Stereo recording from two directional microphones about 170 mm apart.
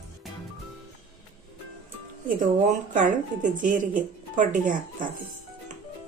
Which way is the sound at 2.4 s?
50° right (ahead or behind).